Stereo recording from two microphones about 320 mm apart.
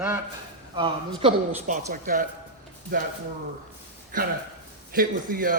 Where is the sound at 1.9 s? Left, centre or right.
Right.